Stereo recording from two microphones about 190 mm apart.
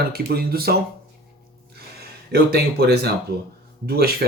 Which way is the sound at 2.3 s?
55° right (ahead or behind).